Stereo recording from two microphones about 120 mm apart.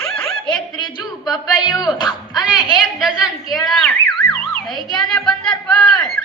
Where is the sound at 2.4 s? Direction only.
Centre (ahead or behind).